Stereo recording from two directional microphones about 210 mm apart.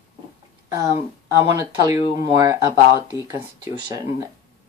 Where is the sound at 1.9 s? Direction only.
15° right (ahead or behind).